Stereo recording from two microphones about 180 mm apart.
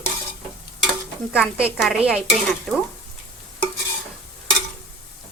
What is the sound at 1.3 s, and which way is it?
Speech, 5° right (ahead or behind).